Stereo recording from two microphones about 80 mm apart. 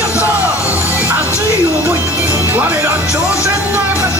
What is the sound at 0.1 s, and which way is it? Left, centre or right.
Music, right.